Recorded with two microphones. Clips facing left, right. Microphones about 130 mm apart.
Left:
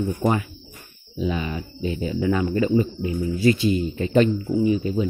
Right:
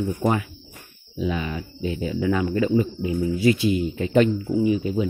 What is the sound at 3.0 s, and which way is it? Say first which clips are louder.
Speech: even; 15° right (ahead or behind).